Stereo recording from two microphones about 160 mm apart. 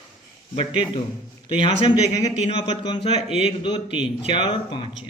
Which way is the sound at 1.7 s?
40° left (ahead or behind).